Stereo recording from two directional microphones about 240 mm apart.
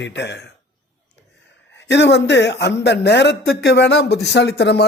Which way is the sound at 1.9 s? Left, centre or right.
Left.